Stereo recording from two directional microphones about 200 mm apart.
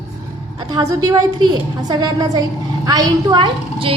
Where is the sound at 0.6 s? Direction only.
20° right (ahead or behind).